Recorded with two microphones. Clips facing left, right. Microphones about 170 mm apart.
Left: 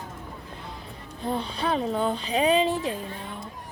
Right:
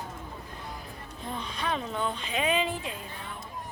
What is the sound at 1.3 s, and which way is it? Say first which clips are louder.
Speech: left 6 dB; 30° left (ahead or behind).